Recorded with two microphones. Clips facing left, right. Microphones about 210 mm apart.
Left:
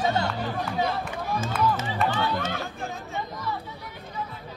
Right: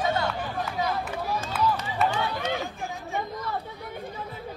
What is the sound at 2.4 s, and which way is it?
Chatter, 15° right (ahead or behind).